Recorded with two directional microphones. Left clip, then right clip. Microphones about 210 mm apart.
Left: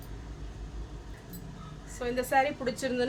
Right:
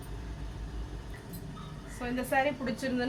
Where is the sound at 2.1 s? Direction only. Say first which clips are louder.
Left 2 dB; 40° left (ahead or behind).